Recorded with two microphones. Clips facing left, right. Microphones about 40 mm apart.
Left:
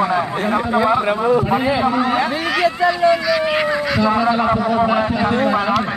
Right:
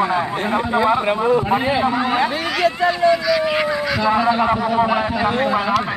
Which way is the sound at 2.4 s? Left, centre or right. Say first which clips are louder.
Left 1 dB; centre.